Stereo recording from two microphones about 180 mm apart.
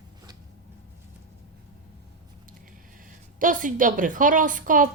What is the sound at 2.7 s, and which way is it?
A woman's voice, 50° right (ahead or behind).